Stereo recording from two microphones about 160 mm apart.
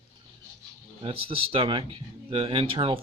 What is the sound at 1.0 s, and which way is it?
Speech, 35° right (ahead or behind).